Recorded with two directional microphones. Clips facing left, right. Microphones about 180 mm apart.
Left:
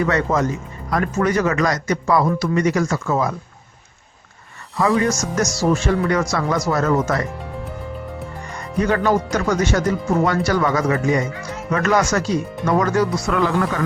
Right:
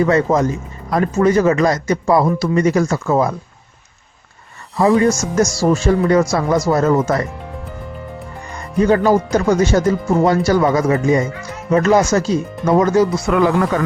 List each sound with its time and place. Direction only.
0.0 s speech: 30° right (ahead or behind)
4.8 s speech: 30° right (ahead or behind)
8.8 s speech: 30° right (ahead or behind)